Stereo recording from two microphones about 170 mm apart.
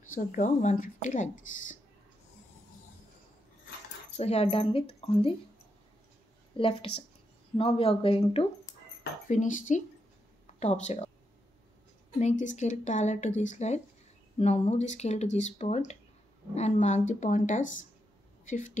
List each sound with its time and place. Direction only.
0.1 s speech: 50° left (ahead or behind)
4.2 s speech: 35° left (ahead or behind)
6.5 s speech: 30° left (ahead or behind)
9.3 s speech: 50° left (ahead or behind)
12.2 s speech: 45° left (ahead or behind)
18.4 s a sound: 45° left (ahead or behind)